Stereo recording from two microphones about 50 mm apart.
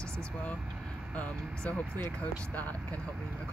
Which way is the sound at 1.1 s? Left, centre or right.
Left.